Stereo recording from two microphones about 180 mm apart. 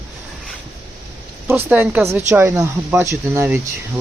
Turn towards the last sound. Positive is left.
turn(degrees=-10)  # may be behind; listen again after turning